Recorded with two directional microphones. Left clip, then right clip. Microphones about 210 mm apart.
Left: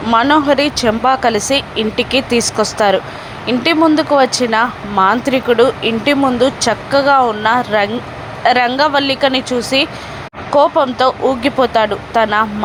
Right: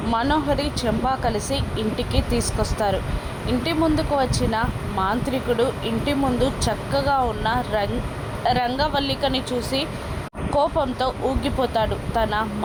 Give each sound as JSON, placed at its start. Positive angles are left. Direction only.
{"t": 0.1, "sound": "speech", "side_deg": 20}